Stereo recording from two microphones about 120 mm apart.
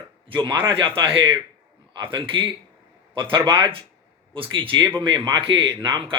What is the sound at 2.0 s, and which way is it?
A man's voice, 45° right (ahead or behind).